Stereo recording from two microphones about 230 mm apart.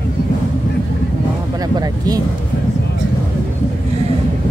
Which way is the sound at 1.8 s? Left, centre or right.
Centre.